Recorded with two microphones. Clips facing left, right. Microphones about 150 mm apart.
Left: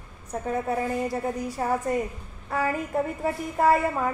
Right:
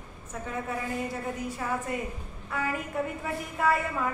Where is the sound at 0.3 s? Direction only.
35° left (ahead or behind).